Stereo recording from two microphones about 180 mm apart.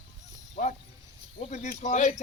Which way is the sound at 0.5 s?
40° left (ahead or behind).